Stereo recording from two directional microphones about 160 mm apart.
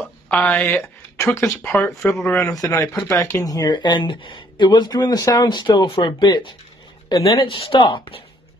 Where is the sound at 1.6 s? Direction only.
10° left (ahead or behind).